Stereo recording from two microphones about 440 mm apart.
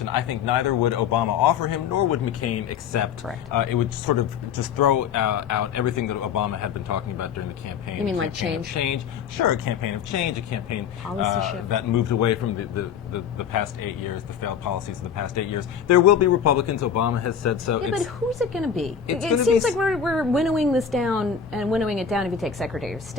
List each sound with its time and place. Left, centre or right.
0.0 s a man's voice: left
3.5 s a man's voice: left
8.2 s speech: right
8.7 s a man's voice: left
17.9 s a woman's voice: centre